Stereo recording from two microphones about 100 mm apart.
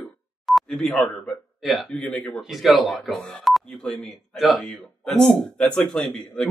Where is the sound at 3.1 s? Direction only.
10° left (ahead or behind).